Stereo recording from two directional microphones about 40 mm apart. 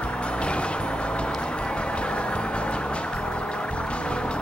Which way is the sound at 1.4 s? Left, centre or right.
Left.